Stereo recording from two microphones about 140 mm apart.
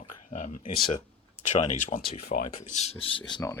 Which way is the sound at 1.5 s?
65° left (ahead or behind).